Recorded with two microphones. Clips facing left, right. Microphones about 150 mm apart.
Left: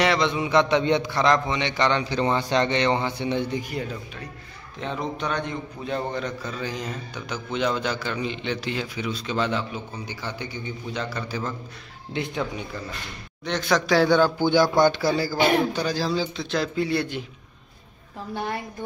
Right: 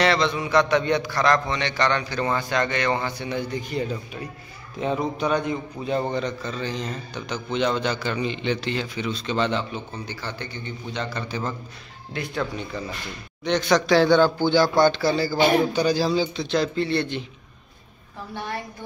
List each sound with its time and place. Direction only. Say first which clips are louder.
0.0 s a man's voice: right 1 dB; 15° left (ahead or behind)
3.6 s a man's voice: right 3 dB; centre (ahead or behind)
12.1 s a man's voice: even; 20° left (ahead or behind)
13.4 s speech: right 3 dB; centre (ahead or behind)